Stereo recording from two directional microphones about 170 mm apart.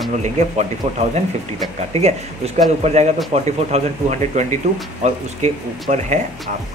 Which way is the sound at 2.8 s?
40° right (ahead or behind).